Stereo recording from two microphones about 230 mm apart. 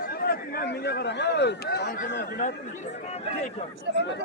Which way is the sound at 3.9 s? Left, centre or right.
Left.